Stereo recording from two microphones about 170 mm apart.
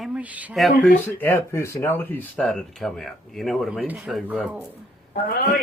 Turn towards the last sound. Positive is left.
turn(degrees=60)  # may be behind; listen again after turning